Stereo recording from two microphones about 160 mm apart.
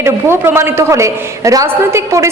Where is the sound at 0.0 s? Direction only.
15° right (ahead or behind).